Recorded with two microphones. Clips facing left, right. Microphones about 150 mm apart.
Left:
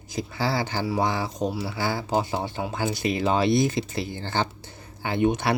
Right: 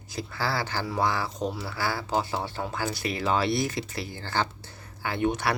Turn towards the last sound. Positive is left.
turn(degrees=20)  # may be behind; listen again after turning